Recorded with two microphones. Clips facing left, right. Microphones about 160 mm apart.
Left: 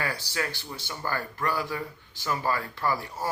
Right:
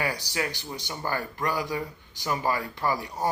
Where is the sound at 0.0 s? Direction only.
15° right (ahead or behind).